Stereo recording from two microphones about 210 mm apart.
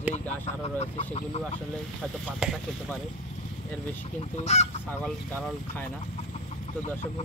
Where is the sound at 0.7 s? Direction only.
30° left (ahead or behind).